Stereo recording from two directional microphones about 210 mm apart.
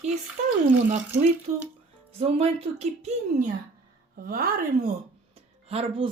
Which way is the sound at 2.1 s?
30° right (ahead or behind).